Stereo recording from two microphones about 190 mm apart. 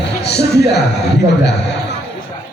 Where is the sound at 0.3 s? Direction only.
60° left (ahead or behind).